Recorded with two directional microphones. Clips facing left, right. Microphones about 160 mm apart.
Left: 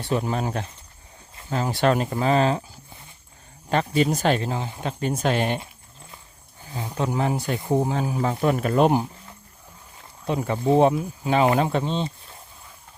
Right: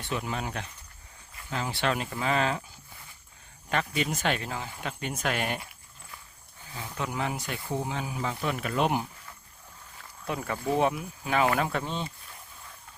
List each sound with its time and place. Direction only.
0.0 s speech: 35° left (ahead or behind)
6.7 s speech: 30° left (ahead or behind)